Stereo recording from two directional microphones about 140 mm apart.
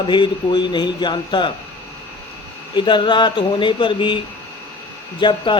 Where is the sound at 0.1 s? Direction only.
35° left (ahead or behind).